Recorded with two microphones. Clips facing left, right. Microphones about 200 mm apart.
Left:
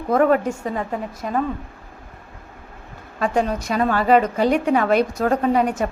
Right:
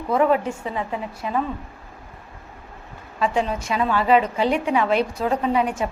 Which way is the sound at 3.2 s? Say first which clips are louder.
Left 2 dB; 45° left (ahead or behind).